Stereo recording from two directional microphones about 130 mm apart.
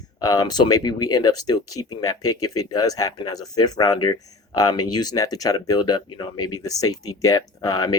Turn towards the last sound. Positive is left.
turn(degrees=30)  # may be behind; listen again after turning